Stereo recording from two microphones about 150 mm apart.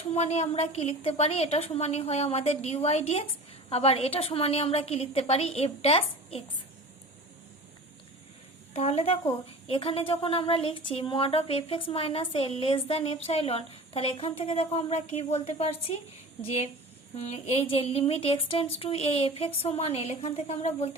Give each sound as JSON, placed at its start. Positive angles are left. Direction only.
{"t": 0.1, "sound": "a woman's voice", "side_deg": 50}
{"t": 8.7, "sound": "a woman's voice", "side_deg": 45}
{"t": 17.2, "sound": "a woman's voice", "side_deg": 45}